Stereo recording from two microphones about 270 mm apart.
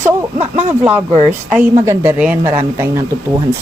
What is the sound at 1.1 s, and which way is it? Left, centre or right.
Speech, right.